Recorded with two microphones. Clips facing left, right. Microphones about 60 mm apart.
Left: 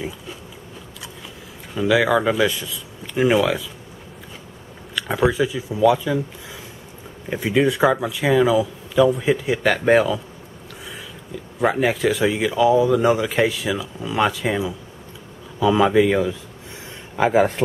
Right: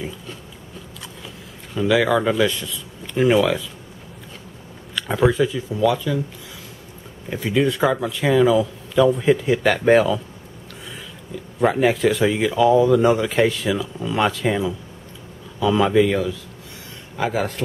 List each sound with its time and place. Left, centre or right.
1.7 s speech: centre
4.9 s speech: centre
7.2 s speech: centre
11.3 s speech: centre
17.2 s a man's voice: left